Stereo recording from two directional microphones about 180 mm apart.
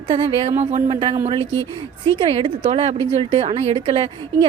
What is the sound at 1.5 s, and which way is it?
Speech, 15° left (ahead or behind).